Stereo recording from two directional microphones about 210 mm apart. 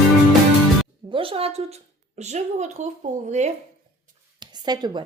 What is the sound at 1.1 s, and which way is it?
Speech, 25° right (ahead or behind).